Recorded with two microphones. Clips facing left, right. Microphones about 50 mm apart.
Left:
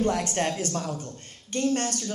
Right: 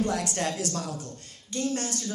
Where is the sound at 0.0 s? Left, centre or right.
Left.